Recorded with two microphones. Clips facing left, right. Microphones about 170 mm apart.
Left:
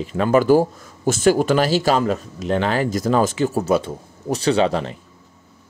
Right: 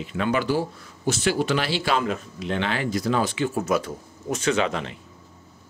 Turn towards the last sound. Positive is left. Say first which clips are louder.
# left 5 dB
turn(degrees=35)  # may be behind; listen again after turning